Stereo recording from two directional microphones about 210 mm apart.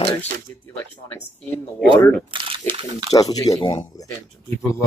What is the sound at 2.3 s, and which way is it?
Speech, 25° right (ahead or behind).